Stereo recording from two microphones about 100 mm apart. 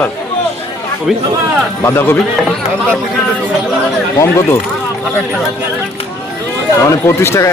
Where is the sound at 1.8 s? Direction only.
25° left (ahead or behind).